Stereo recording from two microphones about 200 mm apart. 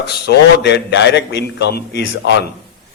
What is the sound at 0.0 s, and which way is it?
A man's voice, 55° left (ahead or behind).